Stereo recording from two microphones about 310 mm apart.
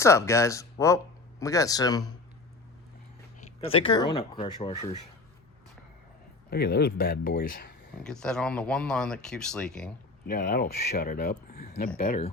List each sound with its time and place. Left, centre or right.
0.0 s speech: centre
3.4 s speech: centre
6.5 s speech: left
8.0 s speech: centre
10.2 s speech: left